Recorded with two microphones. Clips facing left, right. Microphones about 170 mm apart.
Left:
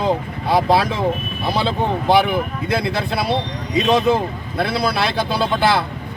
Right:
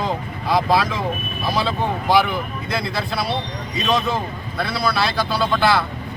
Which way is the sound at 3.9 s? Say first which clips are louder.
Left 4 dB; 25° left (ahead or behind).